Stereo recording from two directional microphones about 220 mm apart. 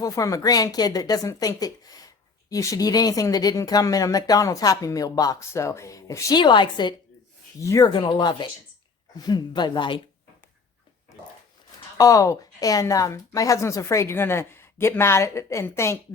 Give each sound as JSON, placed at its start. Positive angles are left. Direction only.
{"t": 0.0, "sound": "speech", "side_deg": 15}
{"t": 11.9, "sound": "speech", "side_deg": 15}